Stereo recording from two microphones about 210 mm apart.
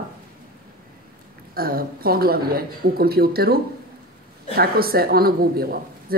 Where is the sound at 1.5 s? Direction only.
45° right (ahead or behind).